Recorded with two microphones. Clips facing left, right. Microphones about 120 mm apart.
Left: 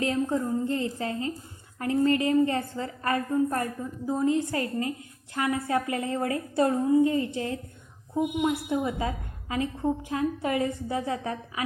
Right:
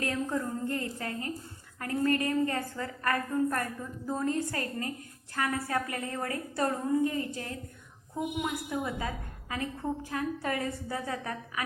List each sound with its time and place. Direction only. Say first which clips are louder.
0.0 s a woman's voice: left 5 dB; 20° left (ahead or behind)